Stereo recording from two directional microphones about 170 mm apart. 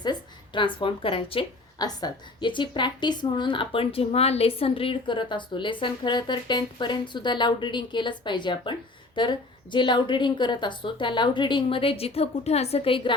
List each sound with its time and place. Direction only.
0.0 s a woman's voice: 25° left (ahead or behind)